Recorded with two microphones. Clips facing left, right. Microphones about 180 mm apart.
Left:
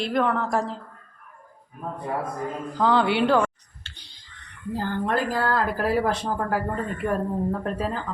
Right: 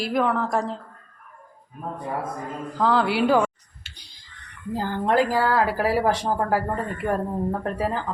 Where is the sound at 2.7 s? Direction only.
Centre (ahead or behind).